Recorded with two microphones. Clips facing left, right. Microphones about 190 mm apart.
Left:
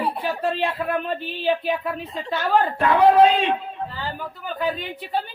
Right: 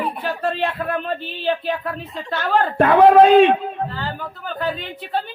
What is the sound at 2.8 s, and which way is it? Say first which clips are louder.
A man's voice: right 5 dB; 55° right (ahead or behind).